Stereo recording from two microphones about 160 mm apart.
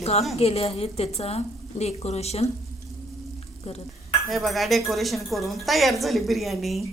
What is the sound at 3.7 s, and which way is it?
Speech, 40° left (ahead or behind).